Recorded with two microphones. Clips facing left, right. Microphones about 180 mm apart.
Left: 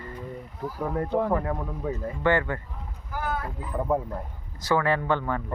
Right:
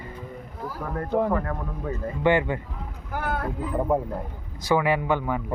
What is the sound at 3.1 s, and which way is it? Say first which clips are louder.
Vehicle: right 3 dB; 60° right (ahead or behind).